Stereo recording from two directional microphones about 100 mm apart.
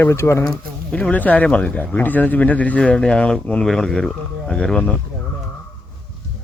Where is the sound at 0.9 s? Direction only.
15° left (ahead or behind).